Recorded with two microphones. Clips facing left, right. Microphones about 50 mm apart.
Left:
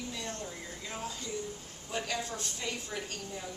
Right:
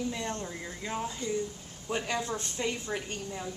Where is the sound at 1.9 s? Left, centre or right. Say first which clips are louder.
Right 4 dB; right.